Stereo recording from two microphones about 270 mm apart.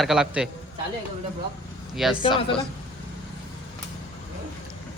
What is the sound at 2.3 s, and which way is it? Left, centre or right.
Speech, centre.